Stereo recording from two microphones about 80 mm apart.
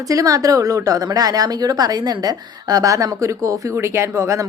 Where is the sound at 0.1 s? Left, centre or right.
Right.